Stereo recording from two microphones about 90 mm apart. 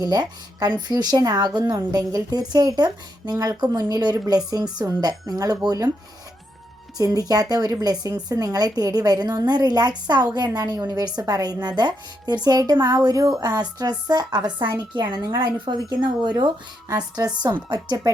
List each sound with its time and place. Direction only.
0.0 s speech: 45° right (ahead or behind)
3.3 s speech: 35° right (ahead or behind)
3.6 s speech: 45° right (ahead or behind)
6.9 s speech: 45° right (ahead or behind)
17.2 s speech: 40° right (ahead or behind)